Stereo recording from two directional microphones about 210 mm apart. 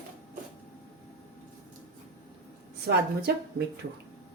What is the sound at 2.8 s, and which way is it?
Speech, 50° right (ahead or behind).